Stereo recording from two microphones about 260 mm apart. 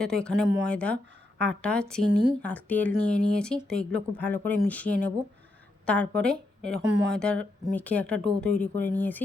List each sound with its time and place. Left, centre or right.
0.0 s speech: centre
2.0 s speech: centre
2.4 s a woman's voice: centre